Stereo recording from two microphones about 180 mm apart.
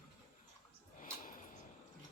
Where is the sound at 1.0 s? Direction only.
50° left (ahead or behind).